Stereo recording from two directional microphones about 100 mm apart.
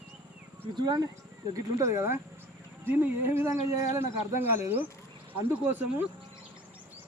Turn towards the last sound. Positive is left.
turn(degrees=-20)  # may be behind; listen again after turning